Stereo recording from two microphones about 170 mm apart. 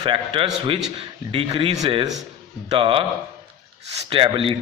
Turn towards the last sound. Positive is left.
turn(degrees=-30)  # may be behind; listen again after turning